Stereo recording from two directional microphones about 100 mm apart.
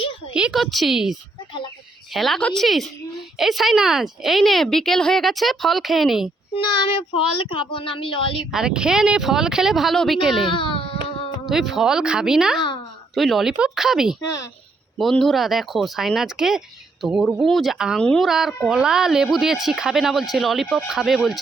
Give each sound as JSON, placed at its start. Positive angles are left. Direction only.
{"t": 0.3, "sound": "speech", "side_deg": -5}
{"t": 2.1, "sound": "speech", "side_deg": 0}
{"t": 6.6, "sound": "a child's voice", "side_deg": 60}
{"t": 8.5, "sound": "speech", "side_deg": -5}
{"t": 10.4, "sound": "baby cry", "side_deg": 55}
{"t": 11.4, "sound": "speech", "side_deg": -5}
{"t": 18.0, "sound": "speech", "side_deg": 5}
{"t": 18.3, "sound": "speech", "side_deg": -5}